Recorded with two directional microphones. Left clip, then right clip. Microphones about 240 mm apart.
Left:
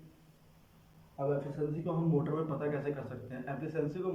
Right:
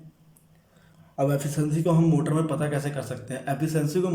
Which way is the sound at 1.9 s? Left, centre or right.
Right.